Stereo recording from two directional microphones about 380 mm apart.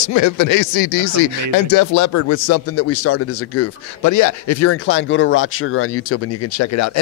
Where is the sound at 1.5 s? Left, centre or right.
Left.